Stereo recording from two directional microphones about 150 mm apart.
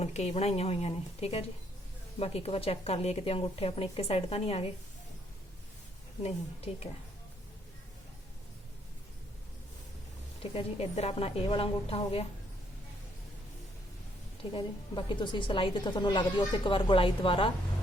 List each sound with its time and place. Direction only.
0.0 s a woman's voice: 45° left (ahead or behind)
6.2 s a woman's voice: 45° left (ahead or behind)
10.5 s a woman's voice: 40° left (ahead or behind)
14.5 s a woman's voice: 35° left (ahead or behind)